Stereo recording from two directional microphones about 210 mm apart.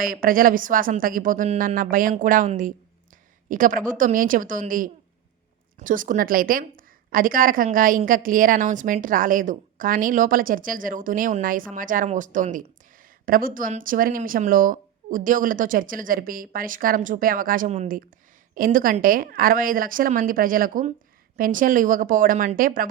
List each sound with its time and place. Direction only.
0.0 s a woman's voice: 45° right (ahead or behind)